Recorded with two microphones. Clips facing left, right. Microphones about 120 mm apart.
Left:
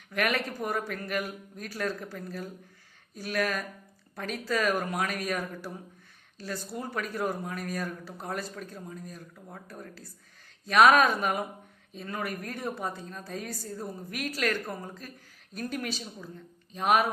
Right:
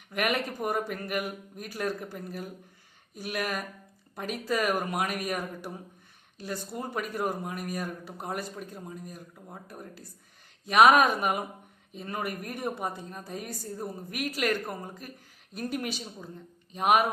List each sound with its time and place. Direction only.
0.1 s speech: 15° right (ahead or behind)